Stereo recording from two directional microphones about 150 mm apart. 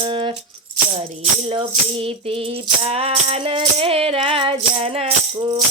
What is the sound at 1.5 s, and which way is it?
Music, 35° right (ahead or behind).